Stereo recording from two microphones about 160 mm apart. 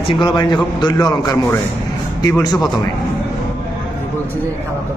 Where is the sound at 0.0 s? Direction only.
30° left (ahead or behind).